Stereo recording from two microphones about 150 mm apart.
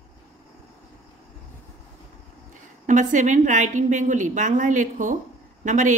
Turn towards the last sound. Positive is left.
turn(degrees=-55)  # may be behind; listen again after turning